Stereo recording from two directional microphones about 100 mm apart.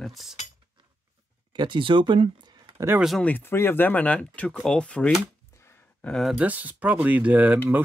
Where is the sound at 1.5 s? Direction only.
50° right (ahead or behind).